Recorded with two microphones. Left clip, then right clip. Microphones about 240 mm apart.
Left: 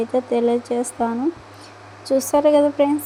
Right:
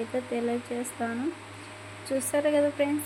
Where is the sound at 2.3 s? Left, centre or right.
Left.